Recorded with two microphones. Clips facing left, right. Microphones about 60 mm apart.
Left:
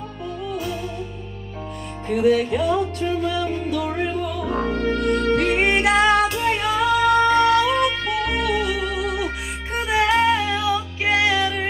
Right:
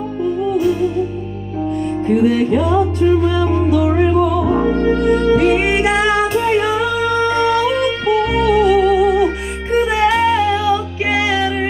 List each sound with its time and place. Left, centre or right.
0.2 s music: centre
2.0 s music: centre
6.3 s music: right
6.9 s music: centre